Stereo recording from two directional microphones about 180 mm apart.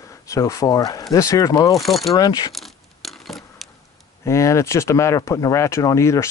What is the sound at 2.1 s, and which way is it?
Speech, 20° left (ahead or behind).